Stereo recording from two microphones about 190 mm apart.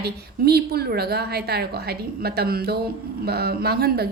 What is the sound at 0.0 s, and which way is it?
A woman's voice, 55° right (ahead or behind).